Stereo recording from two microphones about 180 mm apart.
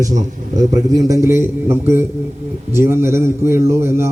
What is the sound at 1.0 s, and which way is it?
A man's voice, 15° right (ahead or behind).